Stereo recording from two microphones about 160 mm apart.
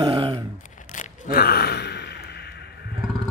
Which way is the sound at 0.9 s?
55° left (ahead or behind).